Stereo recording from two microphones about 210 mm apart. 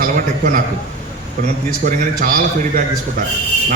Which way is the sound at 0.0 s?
40° right (ahead or behind).